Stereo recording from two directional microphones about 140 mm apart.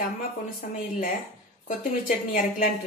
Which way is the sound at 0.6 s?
65° left (ahead or behind).